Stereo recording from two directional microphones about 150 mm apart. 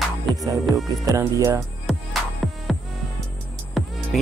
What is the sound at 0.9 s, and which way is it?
Speech, 20° right (ahead or behind).